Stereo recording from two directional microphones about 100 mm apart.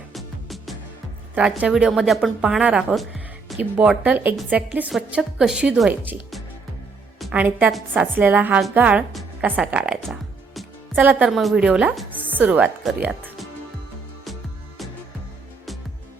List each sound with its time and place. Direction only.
0.1 s music: centre (ahead or behind)
1.4 s speech: 10° right (ahead or behind)
3.5 s music: centre (ahead or behind)
4.0 s speech: 15° right (ahead or behind)
4.9 s a woman's voice: 5° right (ahead or behind)
5.9 s speech: 20° right (ahead or behind)
7.3 s speech: 15° right (ahead or behind)
10.1 s music: centre (ahead or behind)
11.1 s speech: 5° right (ahead or behind)
13.0 s speech: 20° right (ahead or behind)